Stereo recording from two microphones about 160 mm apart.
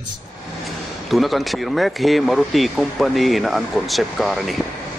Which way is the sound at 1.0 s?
Centre (ahead or behind).